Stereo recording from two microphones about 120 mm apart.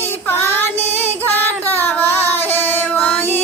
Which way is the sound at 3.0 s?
15° left (ahead or behind).